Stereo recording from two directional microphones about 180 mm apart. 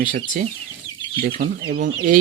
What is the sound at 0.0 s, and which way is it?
Speech, 50° right (ahead or behind).